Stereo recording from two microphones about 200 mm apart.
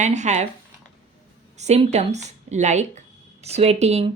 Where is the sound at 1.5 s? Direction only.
35° right (ahead or behind).